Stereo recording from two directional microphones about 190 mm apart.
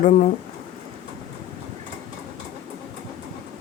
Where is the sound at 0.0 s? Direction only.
40° left (ahead or behind).